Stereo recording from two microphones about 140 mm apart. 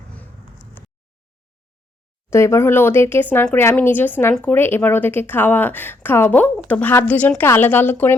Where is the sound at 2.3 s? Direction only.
20° left (ahead or behind).